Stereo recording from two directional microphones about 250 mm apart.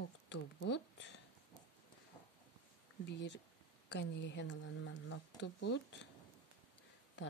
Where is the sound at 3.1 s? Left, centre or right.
Left.